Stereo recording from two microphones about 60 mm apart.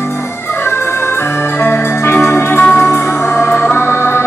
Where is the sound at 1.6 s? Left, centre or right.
Left.